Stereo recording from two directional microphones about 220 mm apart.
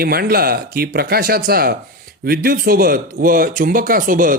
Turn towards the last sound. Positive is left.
turn(degrees=-40)  # may be behind; listen again after turning